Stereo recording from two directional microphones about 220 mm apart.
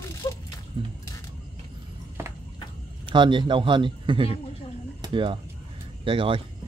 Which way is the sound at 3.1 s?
20° right (ahead or behind).